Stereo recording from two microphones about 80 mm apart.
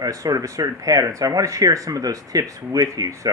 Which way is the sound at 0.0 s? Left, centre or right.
Right.